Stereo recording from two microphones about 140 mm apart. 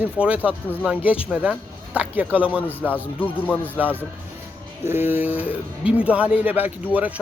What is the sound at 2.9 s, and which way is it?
Speech, 15° left (ahead or behind).